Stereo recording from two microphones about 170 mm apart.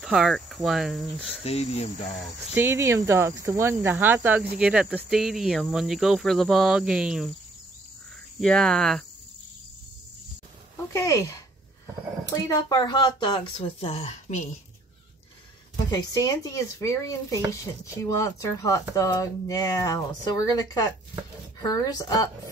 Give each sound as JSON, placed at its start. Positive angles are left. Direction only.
{"t": 0.0, "sound": "cricket", "side_deg": 0}
{"t": 0.7, "sound": "speech", "side_deg": 0}
{"t": 1.4, "sound": "speech", "side_deg": 35}
{"t": 2.5, "sound": "speech", "side_deg": -15}
{"t": 8.4, "sound": "speech", "side_deg": 5}
{"t": 10.9, "sound": "speech", "side_deg": 20}
{"t": 12.4, "sound": "speech", "side_deg": 25}
{"t": 15.9, "sound": "speech", "side_deg": 20}